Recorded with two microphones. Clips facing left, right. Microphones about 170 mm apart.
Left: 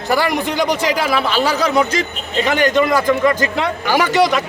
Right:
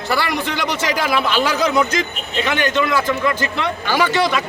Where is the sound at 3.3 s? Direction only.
45° left (ahead or behind).